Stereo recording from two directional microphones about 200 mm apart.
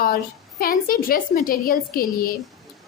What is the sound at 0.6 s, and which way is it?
A woman's voice, 45° left (ahead or behind).